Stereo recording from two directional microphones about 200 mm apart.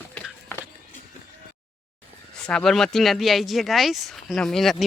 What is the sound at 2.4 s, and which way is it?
Speech, 5° left (ahead or behind).